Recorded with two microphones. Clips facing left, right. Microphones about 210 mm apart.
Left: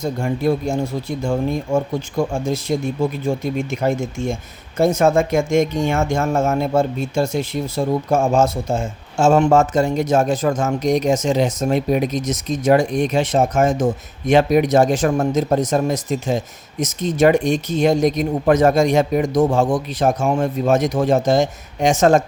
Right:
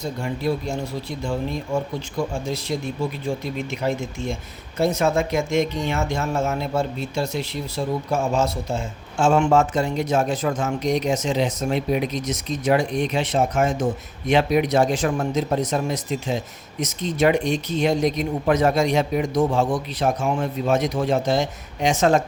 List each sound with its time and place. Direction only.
0.0 s speech: 50° left (ahead or behind)